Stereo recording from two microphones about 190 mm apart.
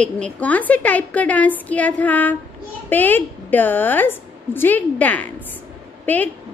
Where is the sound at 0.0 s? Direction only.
5° left (ahead or behind).